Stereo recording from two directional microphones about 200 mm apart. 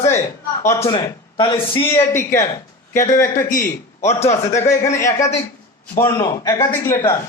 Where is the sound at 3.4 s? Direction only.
40° left (ahead or behind).